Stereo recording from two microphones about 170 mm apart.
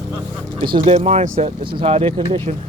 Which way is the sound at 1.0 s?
40° right (ahead or behind).